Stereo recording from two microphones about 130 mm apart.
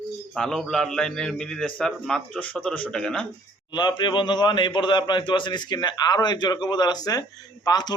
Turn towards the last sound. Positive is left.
turn(degrees=30)  # may be behind; listen again after turning